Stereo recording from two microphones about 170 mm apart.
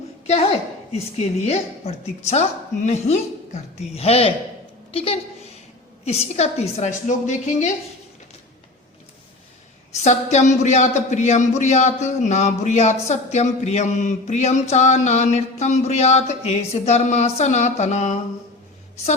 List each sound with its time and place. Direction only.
0.9 s a woman's voice: 40° left (ahead or behind)
9.9 s a man's voice: 45° left (ahead or behind)